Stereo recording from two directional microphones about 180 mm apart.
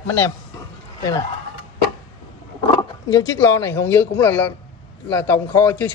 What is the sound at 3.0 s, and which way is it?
A man's voice, 20° left (ahead or behind).